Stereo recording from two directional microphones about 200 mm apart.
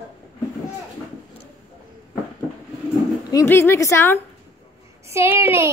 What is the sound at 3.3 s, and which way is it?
Speech, 15° left (ahead or behind).